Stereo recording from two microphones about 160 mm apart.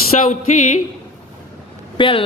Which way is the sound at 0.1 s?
45° left (ahead or behind).